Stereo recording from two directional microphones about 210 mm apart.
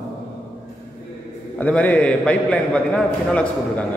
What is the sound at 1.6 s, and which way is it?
A man's voice, 5° left (ahead or behind).